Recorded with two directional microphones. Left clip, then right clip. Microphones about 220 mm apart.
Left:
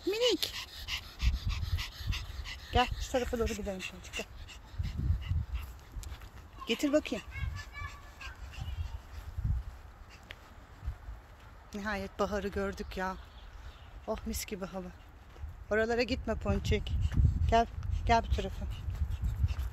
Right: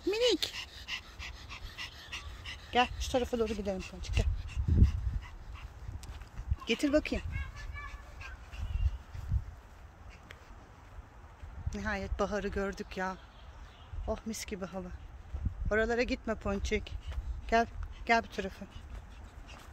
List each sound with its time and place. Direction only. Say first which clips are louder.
0.0 s dog: right 1 dB; 5° right (ahead or behind)
3.4 s speech: right 1 dB; 20° right (ahead or behind)
4.5 s dog: right 10 dB; 5° right (ahead or behind)
6.6 s speech: even; centre (ahead or behind)
7.5 s a sound: left 1 dB; centre (ahead or behind)
11.7 s speech: even; 5° left (ahead or behind)
17.0 s a sound: left 9 dB; centre (ahead or behind)